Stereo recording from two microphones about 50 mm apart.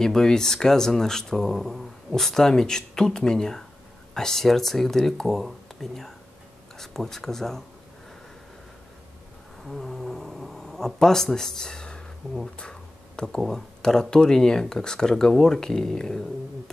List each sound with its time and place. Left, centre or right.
0.0 s speech: centre
9.7 s a sound: centre
13.4 s speech: centre